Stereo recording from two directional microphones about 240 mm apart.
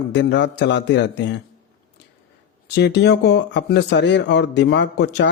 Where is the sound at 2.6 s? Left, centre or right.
Left.